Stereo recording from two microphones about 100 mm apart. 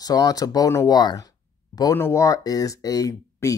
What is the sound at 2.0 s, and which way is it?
Speech, 25° left (ahead or behind).